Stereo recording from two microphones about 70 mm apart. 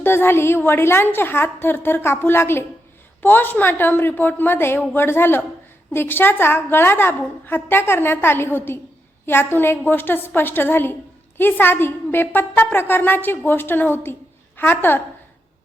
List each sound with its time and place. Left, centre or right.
0.0 s a woman's voice: left